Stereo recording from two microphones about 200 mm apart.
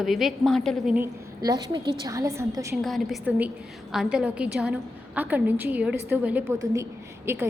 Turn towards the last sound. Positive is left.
turn(degrees=-10)  # may be behind; listen again after turning